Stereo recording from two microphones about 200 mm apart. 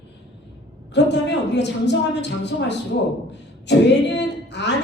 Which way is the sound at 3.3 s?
60° left (ahead or behind).